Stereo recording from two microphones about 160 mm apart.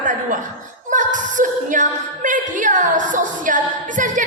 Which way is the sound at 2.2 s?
55° right (ahead or behind).